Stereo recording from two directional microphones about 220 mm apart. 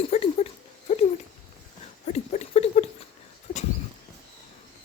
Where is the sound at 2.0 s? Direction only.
30° left (ahead or behind).